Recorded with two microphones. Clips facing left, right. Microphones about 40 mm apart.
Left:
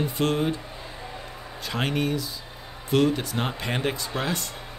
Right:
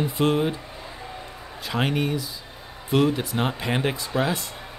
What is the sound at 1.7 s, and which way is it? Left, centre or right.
Speech, centre.